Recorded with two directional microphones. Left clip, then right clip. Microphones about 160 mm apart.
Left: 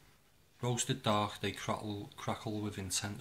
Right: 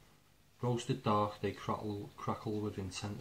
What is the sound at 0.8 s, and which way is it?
Speech, 20° left (ahead or behind).